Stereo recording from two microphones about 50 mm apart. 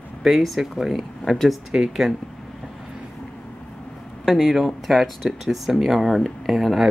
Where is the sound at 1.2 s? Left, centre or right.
Centre.